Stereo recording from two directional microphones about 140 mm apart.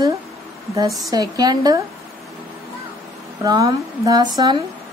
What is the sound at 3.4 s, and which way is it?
Speech, 25° right (ahead or behind).